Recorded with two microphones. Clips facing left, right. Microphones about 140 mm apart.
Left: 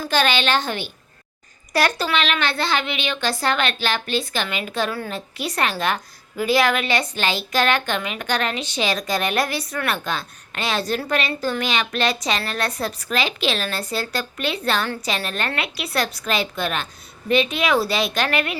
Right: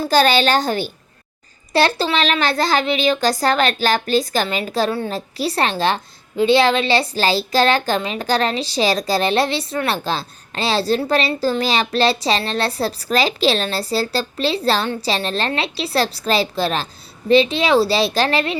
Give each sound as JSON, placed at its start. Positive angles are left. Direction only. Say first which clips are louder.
{"t": 0.0, "sound": "a child's voice", "louder": "right 6 dB", "side_deg": -35}